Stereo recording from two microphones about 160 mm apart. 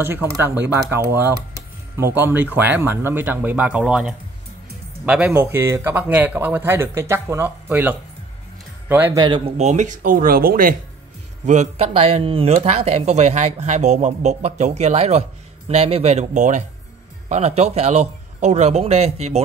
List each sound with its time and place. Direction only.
0.0 s a man's voice: 15° right (ahead or behind)
9.1 s speech: 25° right (ahead or behind)
9.6 s speech: 50° right (ahead or behind)
11.4 s speech: 45° right (ahead or behind)